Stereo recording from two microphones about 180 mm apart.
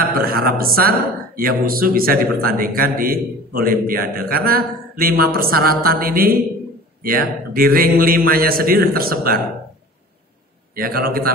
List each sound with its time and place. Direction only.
0.0 s speech: 55° right (ahead or behind)
10.8 s speech: 55° right (ahead or behind)